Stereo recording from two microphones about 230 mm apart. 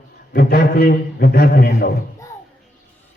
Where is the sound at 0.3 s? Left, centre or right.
Left.